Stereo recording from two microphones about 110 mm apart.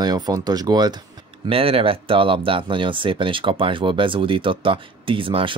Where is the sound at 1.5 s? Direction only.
60° right (ahead or behind).